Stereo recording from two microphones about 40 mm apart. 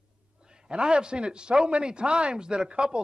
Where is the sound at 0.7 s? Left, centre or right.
Right.